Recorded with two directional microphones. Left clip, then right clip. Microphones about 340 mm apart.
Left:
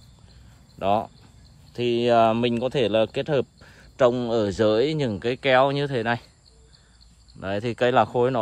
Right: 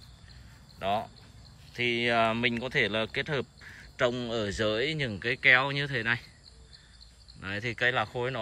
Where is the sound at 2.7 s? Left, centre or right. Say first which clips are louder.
Left 8 dB; centre.